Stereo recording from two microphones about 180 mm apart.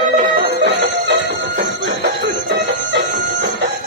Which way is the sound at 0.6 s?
75° right (ahead or behind).